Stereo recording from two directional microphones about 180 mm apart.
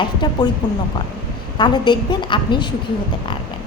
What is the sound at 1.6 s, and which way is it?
A woman's voice, 25° left (ahead or behind).